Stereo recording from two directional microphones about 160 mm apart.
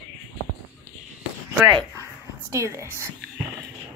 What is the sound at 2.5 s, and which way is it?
Speech, 20° right (ahead or behind).